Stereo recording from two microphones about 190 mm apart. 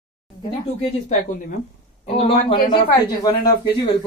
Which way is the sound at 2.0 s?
30° left (ahead or behind).